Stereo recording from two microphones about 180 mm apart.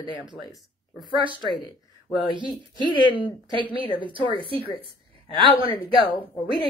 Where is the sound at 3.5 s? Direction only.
25° right (ahead or behind).